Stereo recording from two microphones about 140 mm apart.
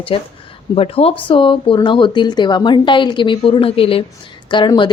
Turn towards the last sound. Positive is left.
turn(degrees=35)  # may be behind; listen again after turning